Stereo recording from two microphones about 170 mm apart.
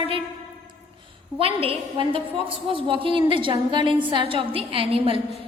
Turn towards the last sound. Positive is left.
turn(degrees=-30)  # may be behind; listen again after turning